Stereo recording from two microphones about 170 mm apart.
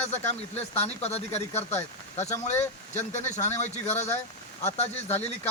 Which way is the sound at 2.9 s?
45° left (ahead or behind).